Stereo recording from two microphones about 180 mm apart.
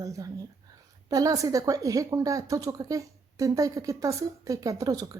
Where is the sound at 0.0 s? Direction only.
20° right (ahead or behind).